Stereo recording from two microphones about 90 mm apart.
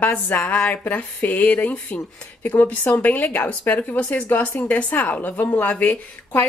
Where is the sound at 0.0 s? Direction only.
20° left (ahead or behind).